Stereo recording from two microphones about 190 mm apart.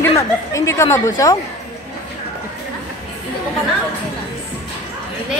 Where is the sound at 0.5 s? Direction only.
15° left (ahead or behind).